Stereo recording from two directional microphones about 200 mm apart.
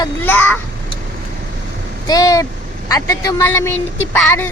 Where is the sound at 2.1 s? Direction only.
15° left (ahead or behind).